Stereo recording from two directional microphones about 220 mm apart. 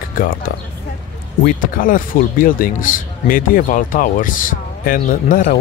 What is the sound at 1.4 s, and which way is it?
Speech, 40° left (ahead or behind).